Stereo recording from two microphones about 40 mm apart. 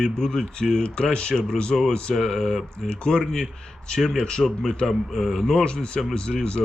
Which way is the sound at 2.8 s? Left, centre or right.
Left.